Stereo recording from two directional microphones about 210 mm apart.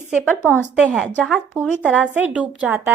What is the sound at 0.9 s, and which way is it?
A woman's voice, 5° left (ahead or behind).